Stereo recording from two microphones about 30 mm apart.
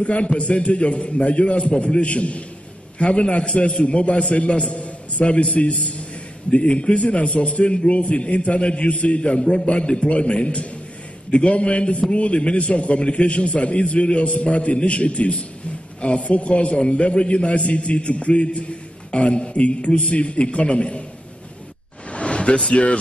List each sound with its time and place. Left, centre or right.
0.0 s a man's voice: left
1.8 s a man's voice: left
16.7 s a man's voice: left
22.1 s a sound: left
22.7 s a man's voice: left